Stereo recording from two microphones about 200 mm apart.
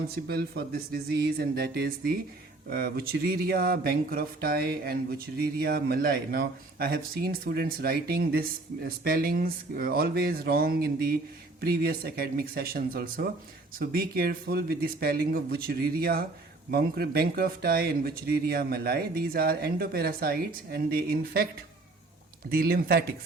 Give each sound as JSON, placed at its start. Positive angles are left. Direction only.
{"t": 0.3, "sound": "speech", "side_deg": -50}
{"t": 22.4, "sound": "speech", "side_deg": -50}